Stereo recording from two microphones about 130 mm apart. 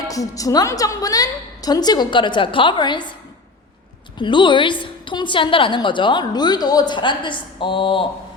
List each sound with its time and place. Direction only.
0.1 s a woman's voice: 25° left (ahead or behind)
4.2 s a woman's voice: 35° left (ahead or behind)